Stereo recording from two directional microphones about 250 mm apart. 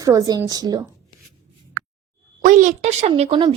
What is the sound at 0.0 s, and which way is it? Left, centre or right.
Speech, centre.